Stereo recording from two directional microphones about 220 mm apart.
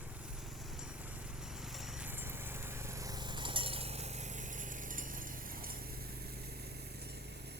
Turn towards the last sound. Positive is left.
turn(degrees=-45)  # may be behind; listen again after turning